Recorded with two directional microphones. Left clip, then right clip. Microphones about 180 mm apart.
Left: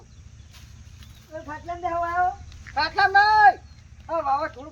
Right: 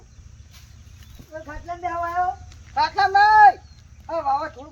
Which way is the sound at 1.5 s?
20° right (ahead or behind).